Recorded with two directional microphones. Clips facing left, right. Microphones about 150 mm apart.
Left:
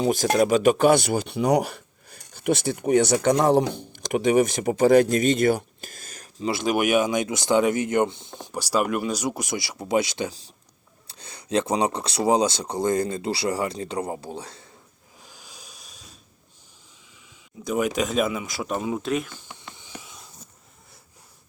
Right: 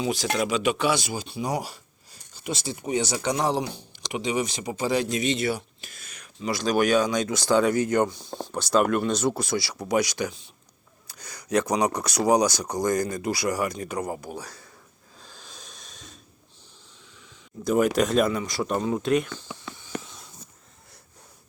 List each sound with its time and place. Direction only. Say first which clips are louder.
0.0 s speech: left 6 dB; 50° left (ahead or behind)
6.4 s speech: even; 25° left (ahead or behind)
8.4 s speech: right 2 dB; 10° left (ahead or behind); by 14.7 s 25° left (ahead or behind)
15.2 s hiss: right 1 dB; 15° left (ahead or behind)
17.7 s speech: right 3 dB; centre (ahead or behind)
20.0 s a sound: even; 5° left (ahead or behind)